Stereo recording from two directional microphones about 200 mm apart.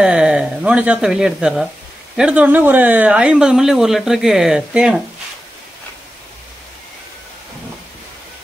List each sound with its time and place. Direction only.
0.0 s speech: 5° right (ahead or behind)